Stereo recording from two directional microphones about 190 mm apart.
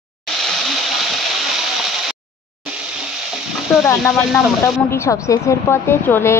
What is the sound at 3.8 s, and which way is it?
A woman's voice, 10° left (ahead or behind).